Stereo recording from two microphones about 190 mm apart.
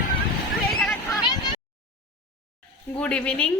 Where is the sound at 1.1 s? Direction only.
25° left (ahead or behind).